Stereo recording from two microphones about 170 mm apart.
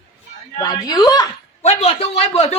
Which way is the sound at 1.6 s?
40° left (ahead or behind).